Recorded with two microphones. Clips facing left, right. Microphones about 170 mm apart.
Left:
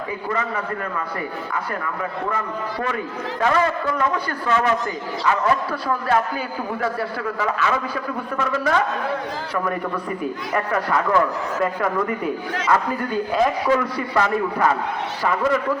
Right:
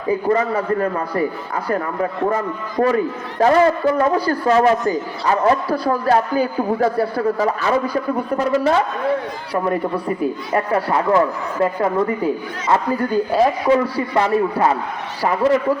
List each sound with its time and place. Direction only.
0.1 s a man's voice: 35° right (ahead or behind)
3.4 s a man's voice: 35° right (ahead or behind)
10.5 s a man's voice: 30° right (ahead or behind)